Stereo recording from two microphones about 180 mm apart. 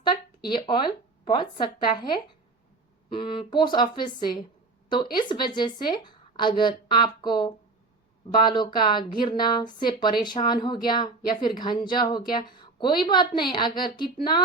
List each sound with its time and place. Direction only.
0.0 s speech: 25° left (ahead or behind)